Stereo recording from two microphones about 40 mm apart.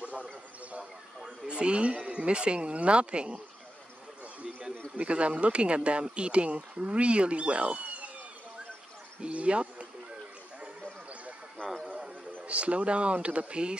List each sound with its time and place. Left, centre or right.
0.0 s a sound: right
1.2 s speech: right
4.9 s speech: right
9.2 s speech: right
11.5 s a sound: centre
12.4 s speech: right